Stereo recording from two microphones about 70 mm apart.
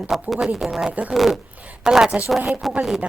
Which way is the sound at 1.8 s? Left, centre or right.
Centre.